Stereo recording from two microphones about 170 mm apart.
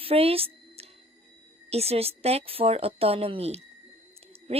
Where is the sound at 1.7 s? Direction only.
35° right (ahead or behind).